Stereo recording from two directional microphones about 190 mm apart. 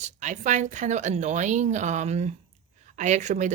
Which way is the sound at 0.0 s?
40° right (ahead or behind).